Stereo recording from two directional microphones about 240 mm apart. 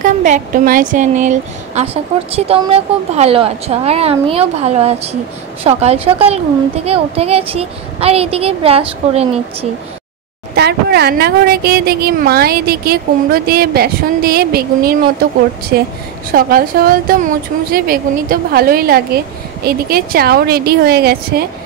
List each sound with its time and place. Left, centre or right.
0.0 s a woman's voice: right
10.5 s a woman's voice: right
16.3 s a woman's voice: right